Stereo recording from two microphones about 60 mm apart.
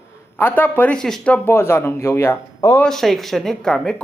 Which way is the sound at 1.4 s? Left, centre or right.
Left.